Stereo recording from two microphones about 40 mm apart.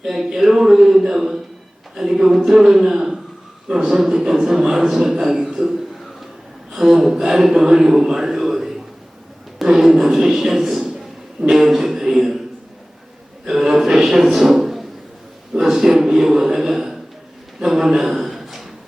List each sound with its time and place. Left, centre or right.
0.0 s a man's voice: centre
13.4 s a man's voice: centre
14.3 s a sound: centre